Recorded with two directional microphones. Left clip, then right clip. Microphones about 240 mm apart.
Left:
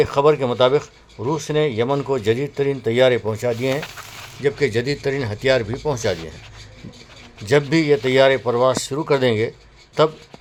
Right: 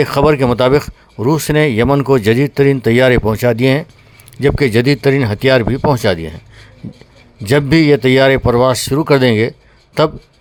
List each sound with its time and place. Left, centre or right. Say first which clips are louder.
0.0 s speech: right 4 dB; right
7.4 s speech: right 6 dB; right